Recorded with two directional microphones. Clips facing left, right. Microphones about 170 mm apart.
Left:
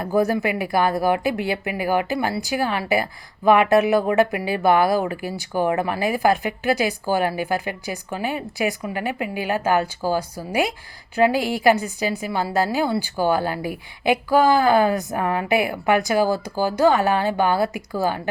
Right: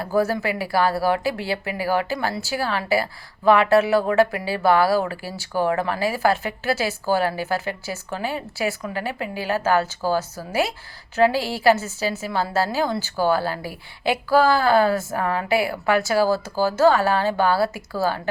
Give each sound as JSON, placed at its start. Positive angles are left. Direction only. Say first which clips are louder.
{"t": 0.0, "sound": "speech", "louder": "left 2 dB", "side_deg": 15}